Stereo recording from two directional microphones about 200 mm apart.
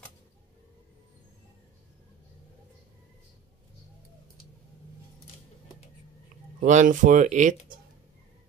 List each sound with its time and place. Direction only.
6.6 s speech: 40° right (ahead or behind)